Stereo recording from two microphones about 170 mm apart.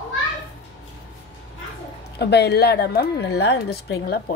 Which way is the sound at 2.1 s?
80° left.